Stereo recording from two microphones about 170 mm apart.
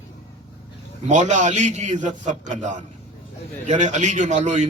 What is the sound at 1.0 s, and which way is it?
A man's voice, 45° right (ahead or behind).